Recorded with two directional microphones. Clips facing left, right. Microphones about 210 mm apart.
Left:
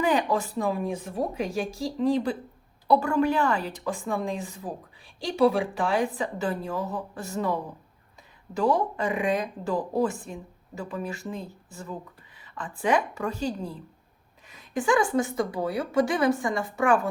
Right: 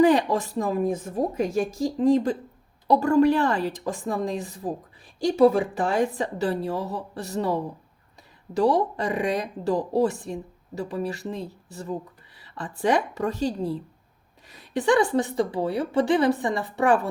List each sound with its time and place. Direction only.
0.0 s a woman's voice: 40° right (ahead or behind)